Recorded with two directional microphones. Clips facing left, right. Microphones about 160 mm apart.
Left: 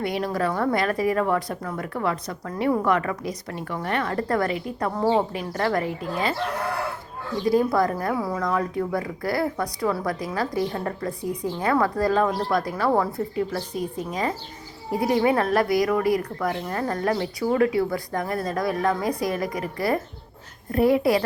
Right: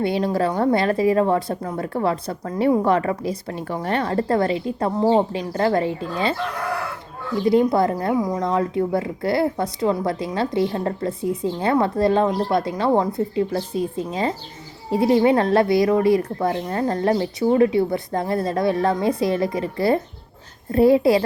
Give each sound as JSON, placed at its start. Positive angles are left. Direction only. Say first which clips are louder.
{"t": 0.0, "sound": "speech", "louder": "right 4 dB", "side_deg": -30}
{"t": 7.4, "sound": "speech", "louder": "right 3 dB", "side_deg": -25}
{"t": 8.4, "sound": "speech", "louder": "right 4 dB", "side_deg": -30}